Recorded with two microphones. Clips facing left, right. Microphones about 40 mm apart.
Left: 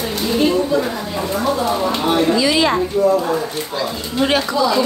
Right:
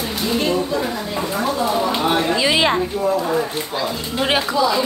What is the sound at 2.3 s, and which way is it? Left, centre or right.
Speech, right.